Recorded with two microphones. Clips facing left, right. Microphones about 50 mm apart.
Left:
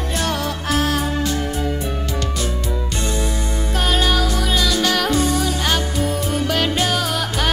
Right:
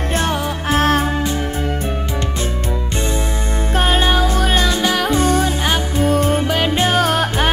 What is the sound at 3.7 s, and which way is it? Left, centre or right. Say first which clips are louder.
Music: right 3 dB; right.